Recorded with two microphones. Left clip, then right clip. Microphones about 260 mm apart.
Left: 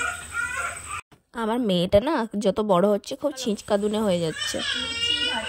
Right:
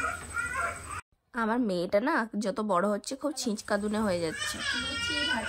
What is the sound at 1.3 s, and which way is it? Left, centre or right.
A woman's voice, left.